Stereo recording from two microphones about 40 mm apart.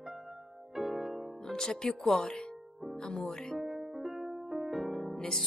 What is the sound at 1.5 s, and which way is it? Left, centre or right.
Speech, centre.